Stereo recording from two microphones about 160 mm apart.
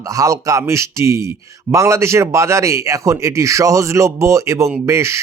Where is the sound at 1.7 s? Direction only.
20° right (ahead or behind).